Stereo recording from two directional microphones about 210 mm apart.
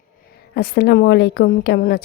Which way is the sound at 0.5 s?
50° left (ahead or behind).